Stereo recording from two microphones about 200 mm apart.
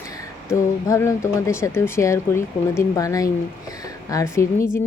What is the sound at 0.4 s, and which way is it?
Speech, 15° left (ahead or behind).